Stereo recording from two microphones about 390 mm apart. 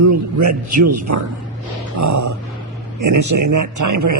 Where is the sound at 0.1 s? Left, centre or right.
Right.